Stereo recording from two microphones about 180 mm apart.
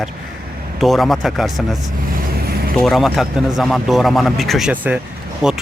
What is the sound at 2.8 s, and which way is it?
A man's voice, centre (ahead or behind).